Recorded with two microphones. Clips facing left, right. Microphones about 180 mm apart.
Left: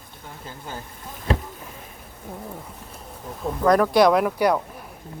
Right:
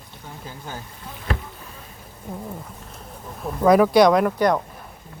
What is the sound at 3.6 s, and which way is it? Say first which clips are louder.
Speech: right 3 dB; 5° right (ahead or behind).